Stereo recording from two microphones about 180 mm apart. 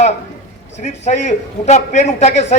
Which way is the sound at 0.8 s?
40° left (ahead or behind).